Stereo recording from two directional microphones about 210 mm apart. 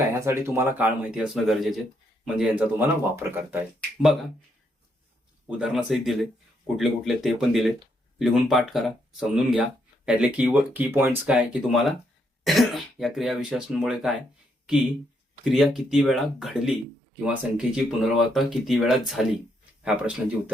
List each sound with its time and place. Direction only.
0.1 s speech: 15° right (ahead or behind)
5.5 s speech: 5° right (ahead or behind)
15.4 s speech: centre (ahead or behind)